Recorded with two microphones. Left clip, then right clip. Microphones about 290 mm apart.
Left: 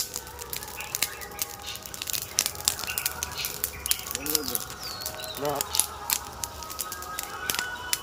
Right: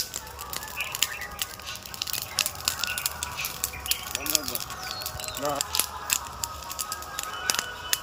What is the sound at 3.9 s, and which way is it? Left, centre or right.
Bird, centre.